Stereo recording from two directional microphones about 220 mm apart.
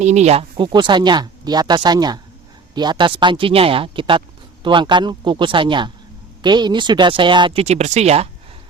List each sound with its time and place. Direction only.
0.0 s speech: 30° right (ahead or behind)